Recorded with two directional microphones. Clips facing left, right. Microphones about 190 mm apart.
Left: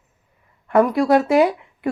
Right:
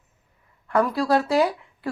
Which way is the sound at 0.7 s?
20° left (ahead or behind).